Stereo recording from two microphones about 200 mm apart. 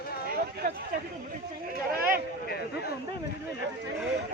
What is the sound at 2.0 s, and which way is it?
Speech, 45° right (ahead or behind).